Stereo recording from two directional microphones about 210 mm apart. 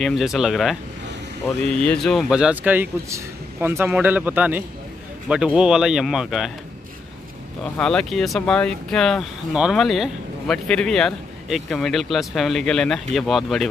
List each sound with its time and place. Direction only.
0.0 s a man's voice: centre (ahead or behind)
7.7 s speech: 5° left (ahead or behind)